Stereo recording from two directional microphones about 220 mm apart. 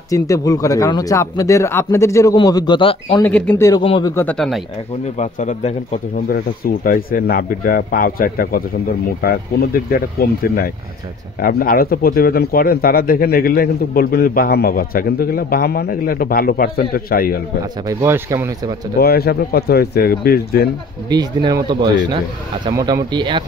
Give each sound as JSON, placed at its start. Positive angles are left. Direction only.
{"t": 0.1, "sound": "speech", "side_deg": 15}
{"t": 3.3, "sound": "speech", "side_deg": 5}
{"t": 4.1, "sound": "speech", "side_deg": 10}
{"t": 5.1, "sound": "speech", "side_deg": 35}
{"t": 6.2, "sound": "speech", "side_deg": 40}
{"t": 9.8, "sound": "a man's voice", "side_deg": 45}
{"t": 17.8, "sound": "speech", "side_deg": -15}
{"t": 18.9, "sound": "a man's voice", "side_deg": 45}
{"t": 21.1, "sound": "speech", "side_deg": -20}